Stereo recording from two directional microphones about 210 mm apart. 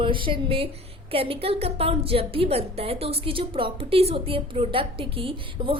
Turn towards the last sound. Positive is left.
turn(degrees=-25)  # may be behind; listen again after turning